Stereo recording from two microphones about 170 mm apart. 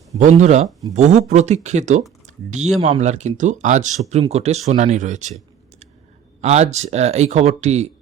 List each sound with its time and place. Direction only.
0.2 s speech: 45° right (ahead or behind)
2.2 s a sound: 45° right (ahead or behind)
2.8 s speech: 40° right (ahead or behind)
6.4 s speech: 40° right (ahead or behind)